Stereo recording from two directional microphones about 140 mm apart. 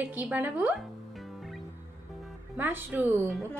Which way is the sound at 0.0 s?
10° right (ahead or behind).